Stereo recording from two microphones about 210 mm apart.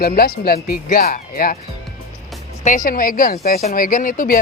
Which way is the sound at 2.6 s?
40° left (ahead or behind).